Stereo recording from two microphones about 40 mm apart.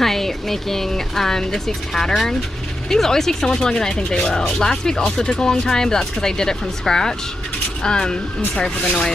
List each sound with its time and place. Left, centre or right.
0.0 s speech: centre